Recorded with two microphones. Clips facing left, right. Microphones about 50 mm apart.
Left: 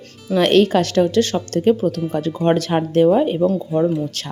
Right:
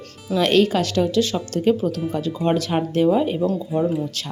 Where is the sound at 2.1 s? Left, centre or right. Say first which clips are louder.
Left 3 dB; left.